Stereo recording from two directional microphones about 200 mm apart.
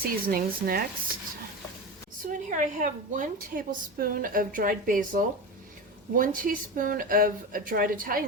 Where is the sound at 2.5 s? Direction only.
40° right (ahead or behind).